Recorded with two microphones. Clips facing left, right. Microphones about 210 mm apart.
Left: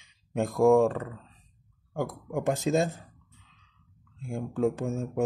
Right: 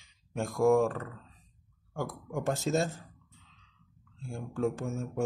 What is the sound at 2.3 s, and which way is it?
Speech, 15° left (ahead or behind).